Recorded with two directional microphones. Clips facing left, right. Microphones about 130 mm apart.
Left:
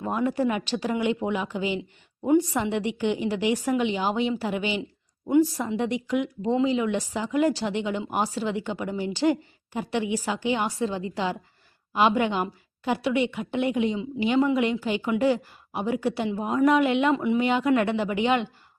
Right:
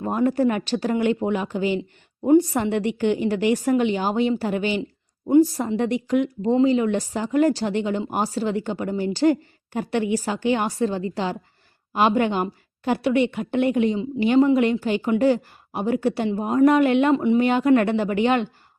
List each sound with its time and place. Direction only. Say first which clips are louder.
0.0 s a woman's voice: right 4 dB; 40° right (ahead or behind)
2.6 s speech: right 4 dB; 50° right (ahead or behind)
5.3 s a woman's voice: right 4 dB; 30° right (ahead or behind)
5.7 s speech: right 5 dB; 50° right (ahead or behind)